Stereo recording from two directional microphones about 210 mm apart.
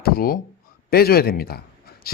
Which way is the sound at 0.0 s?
45° left (ahead or behind).